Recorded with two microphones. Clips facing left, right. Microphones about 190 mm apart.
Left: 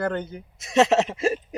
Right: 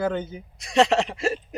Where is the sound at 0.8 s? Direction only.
20° left (ahead or behind).